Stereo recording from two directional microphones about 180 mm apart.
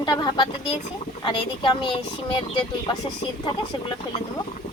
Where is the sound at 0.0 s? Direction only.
25° left (ahead or behind).